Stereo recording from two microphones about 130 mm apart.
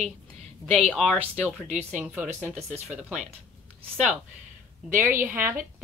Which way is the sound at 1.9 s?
10° right (ahead or behind).